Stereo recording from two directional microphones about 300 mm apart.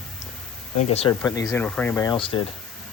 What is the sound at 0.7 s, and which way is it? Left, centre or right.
Speech, left.